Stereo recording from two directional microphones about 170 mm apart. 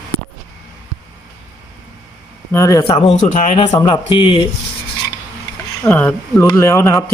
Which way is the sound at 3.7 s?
20° left (ahead or behind).